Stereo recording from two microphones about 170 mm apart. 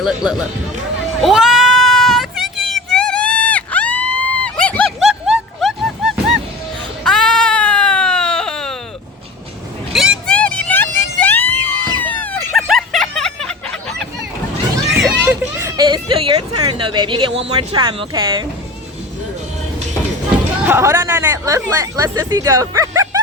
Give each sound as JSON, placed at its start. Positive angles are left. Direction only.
{"t": 0.0, "sound": "speech", "side_deg": -5}
{"t": 1.2, "sound": "sheep", "side_deg": 0}
{"t": 7.0, "sound": "baby cry", "side_deg": 5}
{"t": 9.9, "sound": "vehicle", "side_deg": 0}
{"t": 11.9, "sound": "a sound", "side_deg": 10}
{"t": 15.8, "sound": "a sound", "side_deg": -30}
{"t": 17.6, "sound": "speech", "side_deg": -30}
{"t": 20.7, "sound": "speech", "side_deg": -15}